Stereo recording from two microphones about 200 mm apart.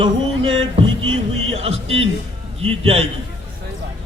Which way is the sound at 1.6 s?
30° right (ahead or behind).